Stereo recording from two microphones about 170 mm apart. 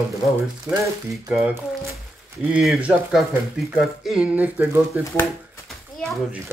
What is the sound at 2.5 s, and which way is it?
Speech, 5° right (ahead or behind).